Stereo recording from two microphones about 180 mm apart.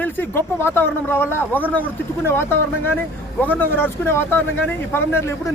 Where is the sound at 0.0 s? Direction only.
10° left (ahead or behind).